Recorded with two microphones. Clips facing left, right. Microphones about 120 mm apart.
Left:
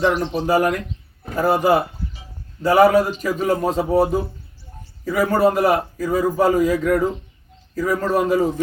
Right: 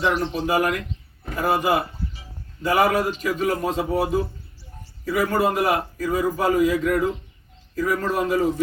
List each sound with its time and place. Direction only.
0.0 s a man's voice: 30° left (ahead or behind)